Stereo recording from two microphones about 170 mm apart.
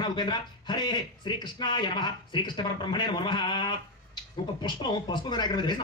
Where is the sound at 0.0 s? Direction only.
25° left (ahead or behind).